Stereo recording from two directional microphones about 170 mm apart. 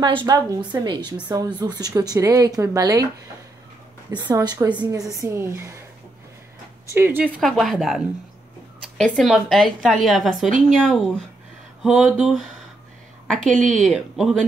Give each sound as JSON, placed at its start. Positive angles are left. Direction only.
{"t": 0.0, "sound": "speech", "side_deg": -30}
{"t": 4.1, "sound": "speech", "side_deg": -25}
{"t": 6.9, "sound": "speech", "side_deg": -15}
{"t": 7.4, "sound": "a woman's voice", "side_deg": 0}